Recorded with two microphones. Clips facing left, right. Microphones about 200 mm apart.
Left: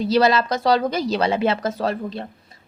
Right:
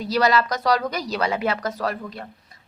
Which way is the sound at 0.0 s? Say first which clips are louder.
Left 3 dB; 25° left (ahead or behind).